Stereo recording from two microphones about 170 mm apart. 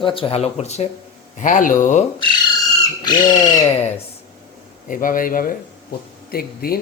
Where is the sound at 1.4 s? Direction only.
50° left (ahead or behind).